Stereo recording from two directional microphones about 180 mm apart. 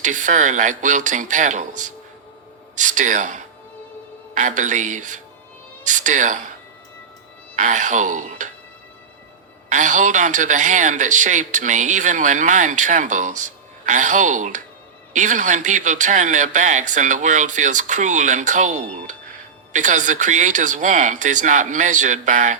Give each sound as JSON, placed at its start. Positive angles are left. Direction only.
{"t": 0.0, "sound": "speech", "side_deg": -45}
{"t": 7.5, "sound": "speech", "side_deg": -45}
{"t": 9.6, "sound": "speech", "side_deg": -45}